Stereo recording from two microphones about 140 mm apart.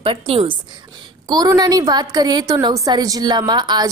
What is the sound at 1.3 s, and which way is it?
A woman's voice, 30° right (ahead or behind).